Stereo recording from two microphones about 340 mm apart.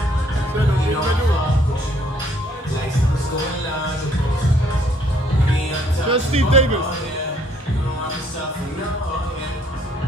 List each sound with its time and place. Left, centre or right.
6.0 s speech: centre